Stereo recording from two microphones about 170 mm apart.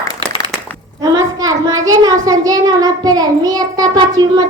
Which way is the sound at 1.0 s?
20° right (ahead or behind).